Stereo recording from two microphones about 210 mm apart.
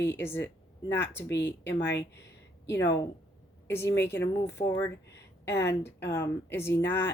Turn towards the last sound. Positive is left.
turn(degrees=10)  # may be behind; listen again after turning